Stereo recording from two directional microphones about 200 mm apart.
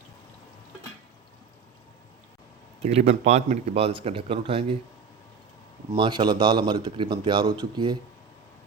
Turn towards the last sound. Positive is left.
turn(degrees=-20)  # may be behind; listen again after turning